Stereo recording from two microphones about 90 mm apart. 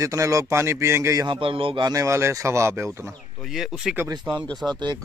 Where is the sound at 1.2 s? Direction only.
80° right.